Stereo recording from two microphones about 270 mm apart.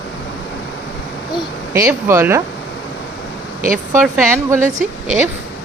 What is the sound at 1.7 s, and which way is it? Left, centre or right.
Speech, centre.